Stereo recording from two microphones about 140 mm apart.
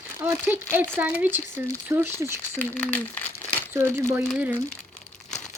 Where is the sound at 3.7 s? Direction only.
20° right (ahead or behind).